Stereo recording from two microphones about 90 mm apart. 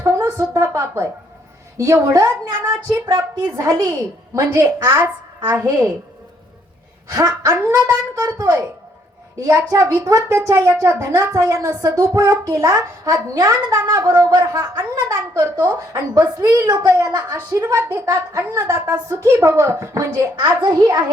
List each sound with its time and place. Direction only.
0.0 s a sound: 35° right (ahead or behind)
0.5 s speech: 35° right (ahead or behind)
7.1 s speech: 40° right (ahead or behind)
20.4 s a child's voice: 55° right (ahead or behind)